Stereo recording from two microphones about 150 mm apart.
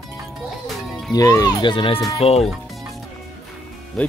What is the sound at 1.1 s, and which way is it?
Speech, 25° left (ahead or behind).